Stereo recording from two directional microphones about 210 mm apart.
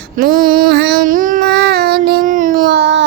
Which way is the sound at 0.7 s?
55° right (ahead or behind).